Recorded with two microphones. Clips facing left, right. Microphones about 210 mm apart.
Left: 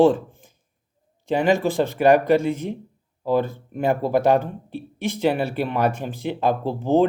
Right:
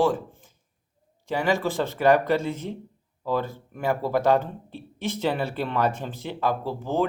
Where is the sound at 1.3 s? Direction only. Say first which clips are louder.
Left 5 dB; 15° left (ahead or behind).